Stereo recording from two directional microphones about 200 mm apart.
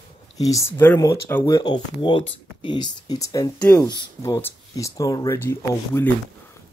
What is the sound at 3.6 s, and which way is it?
Speech, 5° left (ahead or behind).